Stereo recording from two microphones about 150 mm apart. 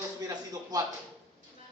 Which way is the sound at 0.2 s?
25° right (ahead or behind).